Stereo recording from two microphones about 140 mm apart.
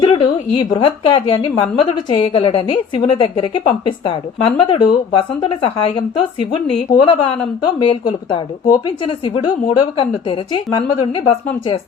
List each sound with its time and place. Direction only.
0.0 s a woman's voice: 35° left (ahead or behind)